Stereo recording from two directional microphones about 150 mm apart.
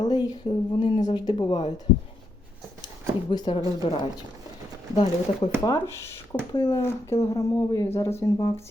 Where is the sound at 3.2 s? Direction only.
30° left (ahead or behind).